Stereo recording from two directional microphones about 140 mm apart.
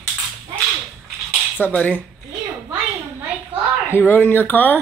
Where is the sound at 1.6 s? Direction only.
10° left (ahead or behind).